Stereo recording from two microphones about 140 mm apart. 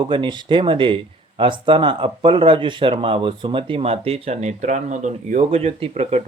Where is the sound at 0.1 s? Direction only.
35° right (ahead or behind).